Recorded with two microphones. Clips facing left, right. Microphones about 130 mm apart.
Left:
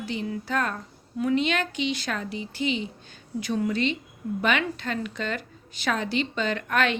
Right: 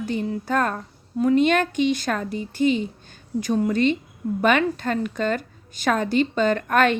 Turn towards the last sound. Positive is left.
turn(degrees=-45)  # may be behind; listen again after turning